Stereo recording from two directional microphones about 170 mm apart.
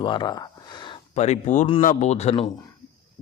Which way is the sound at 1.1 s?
40° left (ahead or behind).